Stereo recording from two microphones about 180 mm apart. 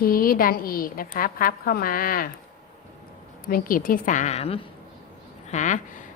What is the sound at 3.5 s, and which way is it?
A woman's voice, 50° left (ahead or behind).